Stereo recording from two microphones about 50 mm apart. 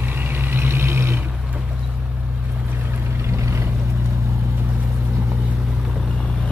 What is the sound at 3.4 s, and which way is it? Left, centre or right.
Boat, right.